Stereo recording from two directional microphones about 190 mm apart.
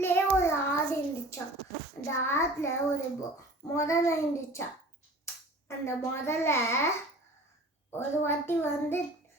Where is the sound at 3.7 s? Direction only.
15° left (ahead or behind).